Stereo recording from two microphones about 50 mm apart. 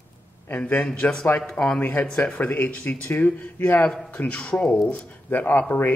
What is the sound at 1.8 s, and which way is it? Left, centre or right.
Speech, left.